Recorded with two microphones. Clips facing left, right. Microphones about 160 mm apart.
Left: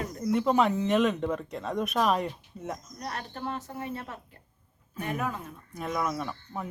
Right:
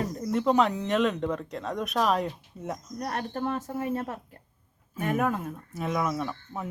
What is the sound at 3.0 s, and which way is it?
Speech, 45° right (ahead or behind).